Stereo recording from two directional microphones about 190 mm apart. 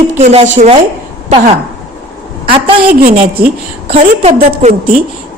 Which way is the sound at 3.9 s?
35° right (ahead or behind).